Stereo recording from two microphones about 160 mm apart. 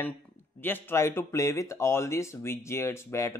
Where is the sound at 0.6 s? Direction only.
10° left (ahead or behind).